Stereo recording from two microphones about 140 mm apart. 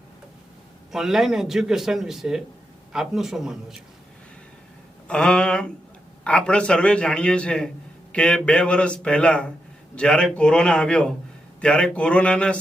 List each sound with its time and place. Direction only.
0.9 s a man's voice: centre (ahead or behind)
5.0 s a man's voice: 5° left (ahead or behind)